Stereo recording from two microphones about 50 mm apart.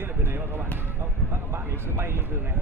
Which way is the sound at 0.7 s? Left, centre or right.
Right.